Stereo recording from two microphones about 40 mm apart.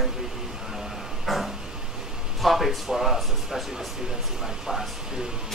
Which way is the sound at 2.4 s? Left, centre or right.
Centre.